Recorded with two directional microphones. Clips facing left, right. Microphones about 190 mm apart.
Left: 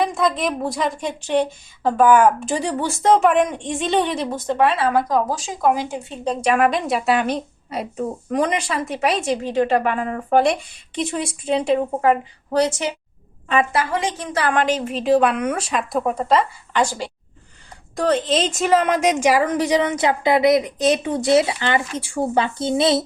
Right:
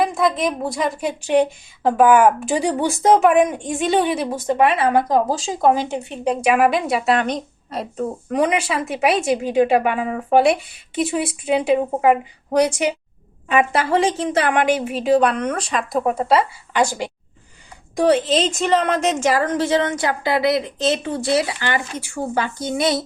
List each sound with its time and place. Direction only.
0.0 s a woman's voice: centre (ahead or behind); by 6.3 s 20° right (ahead or behind)
6.3 s a woman's voice: 5° right (ahead or behind)
8.4 s a woman's voice: 5° right (ahead or behind)
13.7 s a woman's voice: 30° right (ahead or behind); by 18.2 s 10° right (ahead or behind)
18.3 s a woman's voice: centre (ahead or behind); by 23.0 s 25° left (ahead or behind)